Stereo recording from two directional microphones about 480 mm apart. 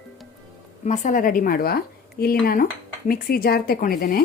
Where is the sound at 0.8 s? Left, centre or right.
Centre.